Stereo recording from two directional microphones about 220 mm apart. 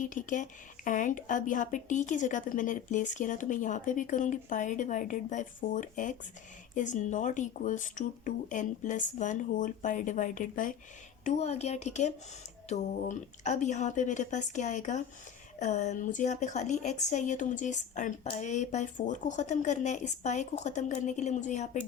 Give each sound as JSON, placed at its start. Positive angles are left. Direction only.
{"t": 0.0, "sound": "a woman's voice", "side_deg": 35}